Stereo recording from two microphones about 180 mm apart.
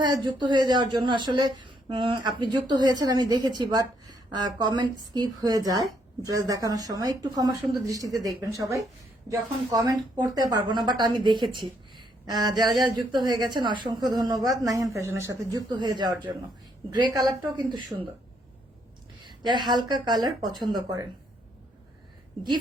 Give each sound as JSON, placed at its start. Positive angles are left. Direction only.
{"t": 0.0, "sound": "a woman's voice", "side_deg": -25}
{"t": 19.2, "sound": "a woman's voice", "side_deg": -25}